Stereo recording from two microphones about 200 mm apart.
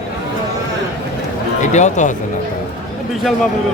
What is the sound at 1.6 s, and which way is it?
Speech, 35° left (ahead or behind).